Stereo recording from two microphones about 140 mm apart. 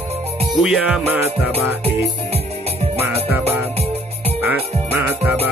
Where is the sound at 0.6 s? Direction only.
5° right (ahead or behind).